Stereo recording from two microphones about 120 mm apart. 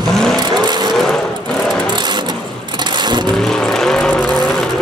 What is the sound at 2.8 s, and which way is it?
Vehicle, 40° right (ahead or behind).